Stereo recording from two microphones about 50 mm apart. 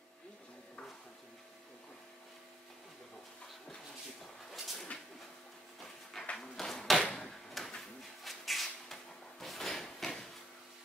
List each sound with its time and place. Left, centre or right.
4.5 s a sound: centre
6.3 s door: centre
9.4 s drawer open or close: centre